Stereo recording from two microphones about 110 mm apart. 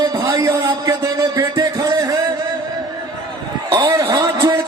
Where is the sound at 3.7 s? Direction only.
30° right (ahead or behind).